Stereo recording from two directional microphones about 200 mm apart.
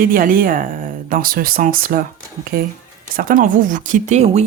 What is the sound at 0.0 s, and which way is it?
Speech, 45° right (ahead or behind).